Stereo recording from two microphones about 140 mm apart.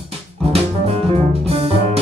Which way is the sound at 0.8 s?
50° right (ahead or behind).